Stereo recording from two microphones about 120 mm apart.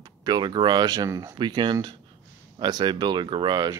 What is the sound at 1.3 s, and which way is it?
Speech, 40° right (ahead or behind).